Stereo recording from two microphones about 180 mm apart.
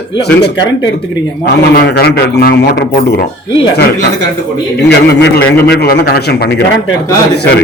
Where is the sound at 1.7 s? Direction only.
55° left (ahead or behind).